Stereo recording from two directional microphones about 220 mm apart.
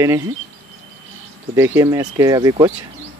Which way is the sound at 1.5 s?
10° right (ahead or behind).